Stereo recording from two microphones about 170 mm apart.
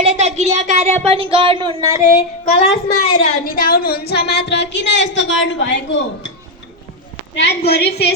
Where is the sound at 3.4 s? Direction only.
60° left (ahead or behind); by 6.3 s 90° left.